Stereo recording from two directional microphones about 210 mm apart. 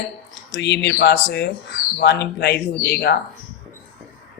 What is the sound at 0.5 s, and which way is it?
Speech, 55° left (ahead or behind).